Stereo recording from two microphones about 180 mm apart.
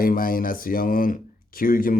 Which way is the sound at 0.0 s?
50° left (ahead or behind).